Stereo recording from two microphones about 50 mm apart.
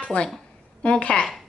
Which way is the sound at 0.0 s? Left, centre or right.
Left.